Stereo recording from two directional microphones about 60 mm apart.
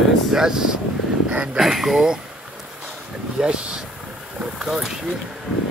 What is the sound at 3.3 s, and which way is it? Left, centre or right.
Speech, centre.